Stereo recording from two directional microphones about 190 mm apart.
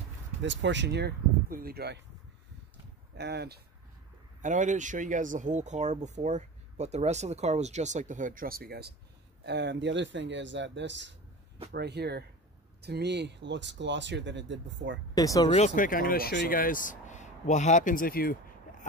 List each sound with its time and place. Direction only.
0.4 s speech: 70° right (ahead or behind); by 2.0 s 55° right (ahead or behind)
3.2 s speech: 60° right (ahead or behind)
4.4 s speech: 40° right (ahead or behind); by 11.1 s 70° right (ahead or behind)
11.7 s speech: 60° right (ahead or behind)
15.1 s speech: 20° left (ahead or behind)
15.5 s speech: 40° left (ahead or behind)